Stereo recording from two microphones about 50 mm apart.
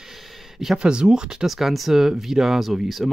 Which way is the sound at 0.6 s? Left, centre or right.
Centre.